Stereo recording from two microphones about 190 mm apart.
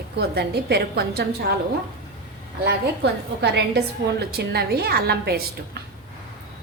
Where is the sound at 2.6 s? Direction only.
60° right (ahead or behind).